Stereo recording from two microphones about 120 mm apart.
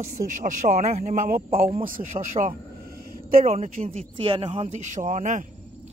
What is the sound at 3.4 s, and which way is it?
Speech, 60° right (ahead or behind).